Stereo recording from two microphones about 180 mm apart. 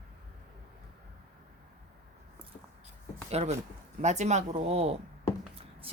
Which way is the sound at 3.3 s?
35° right (ahead or behind).